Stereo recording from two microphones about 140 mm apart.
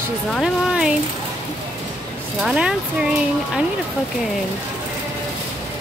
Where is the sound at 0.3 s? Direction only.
Centre (ahead or behind).